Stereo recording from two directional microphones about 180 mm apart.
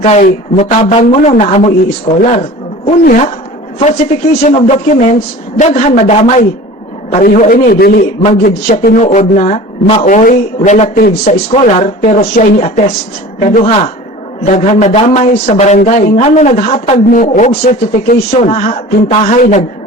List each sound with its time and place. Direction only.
0.0 s a woman's voice: 40° left (ahead or behind)
3.8 s speech: 40° left (ahead or behind)
4.3 s a man's voice: 60° left (ahead or behind)
4.5 s a man's voice: 35° left (ahead or behind); by 8.9 s 55° left (ahead or behind)
9.0 s speech: 40° left (ahead or behind)
10.1 s a woman's voice: 50° left (ahead or behind)
15.8 s a woman's voice: 45° left (ahead or behind)
18.3 s speech: 40° left (ahead or behind)